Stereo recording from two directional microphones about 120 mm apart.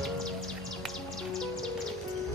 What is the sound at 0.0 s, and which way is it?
Music, centre (ahead or behind).